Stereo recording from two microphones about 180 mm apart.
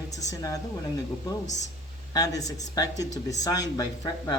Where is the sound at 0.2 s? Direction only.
20° left (ahead or behind).